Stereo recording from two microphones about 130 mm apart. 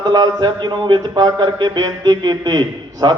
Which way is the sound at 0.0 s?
30° right (ahead or behind).